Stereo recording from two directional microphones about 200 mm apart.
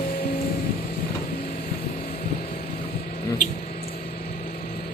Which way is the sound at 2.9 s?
45° left (ahead or behind).